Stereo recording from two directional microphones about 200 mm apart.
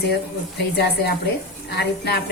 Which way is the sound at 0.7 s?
55° left (ahead or behind).